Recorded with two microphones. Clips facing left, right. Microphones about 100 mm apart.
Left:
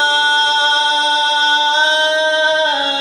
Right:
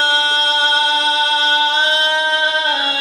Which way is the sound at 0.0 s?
25° left (ahead or behind).